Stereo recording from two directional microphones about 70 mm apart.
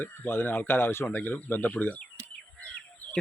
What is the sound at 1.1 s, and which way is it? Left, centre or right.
Speech, left.